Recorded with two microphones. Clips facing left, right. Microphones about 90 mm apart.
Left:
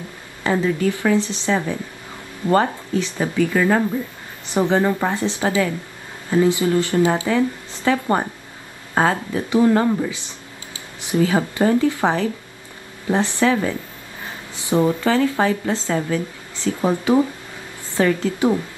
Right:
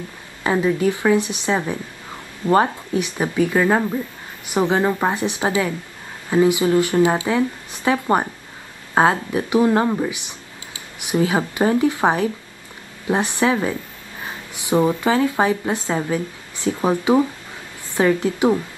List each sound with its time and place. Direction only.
0.4 s speech: 15° right (ahead or behind)